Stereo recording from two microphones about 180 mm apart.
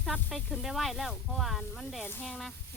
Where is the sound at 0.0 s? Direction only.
Centre (ahead or behind).